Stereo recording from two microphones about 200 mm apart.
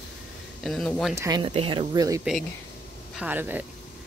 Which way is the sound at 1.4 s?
25° right (ahead or behind).